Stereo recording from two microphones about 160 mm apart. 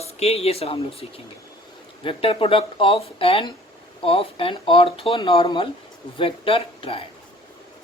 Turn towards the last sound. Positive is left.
turn(degrees=35)  # may be behind; listen again after turning